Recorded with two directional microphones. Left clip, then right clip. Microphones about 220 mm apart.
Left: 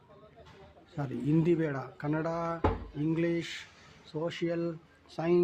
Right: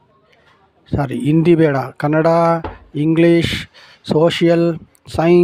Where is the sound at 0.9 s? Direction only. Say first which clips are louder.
Right 14 dB; 45° right (ahead or behind).